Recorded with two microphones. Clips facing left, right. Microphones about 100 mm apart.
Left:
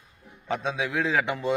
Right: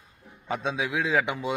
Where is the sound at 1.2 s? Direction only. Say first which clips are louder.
Left 3 dB; 10° right (ahead or behind).